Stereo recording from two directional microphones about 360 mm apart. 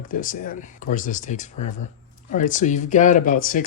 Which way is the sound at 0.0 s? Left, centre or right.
Left.